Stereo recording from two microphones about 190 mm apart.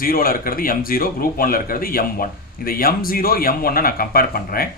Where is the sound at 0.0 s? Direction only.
50° left (ahead or behind).